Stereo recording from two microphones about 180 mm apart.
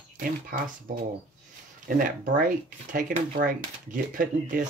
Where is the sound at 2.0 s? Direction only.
50° right (ahead or behind).